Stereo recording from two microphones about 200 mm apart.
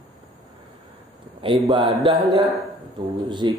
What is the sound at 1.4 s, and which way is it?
Speech, 25° right (ahead or behind).